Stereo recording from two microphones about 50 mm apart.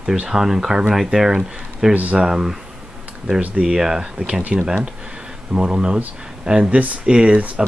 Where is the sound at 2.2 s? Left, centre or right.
Centre.